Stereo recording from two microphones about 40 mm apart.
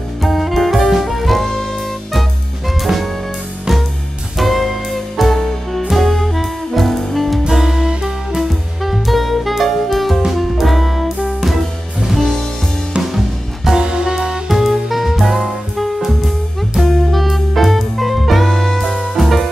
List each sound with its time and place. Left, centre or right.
0.2 s music: centre
2.8 s jazz: centre
4.4 s music: centre
7.5 s music: centre
8.4 s music: centre
12.1 s music: centre
13.7 s music: centre
14.5 s music: centre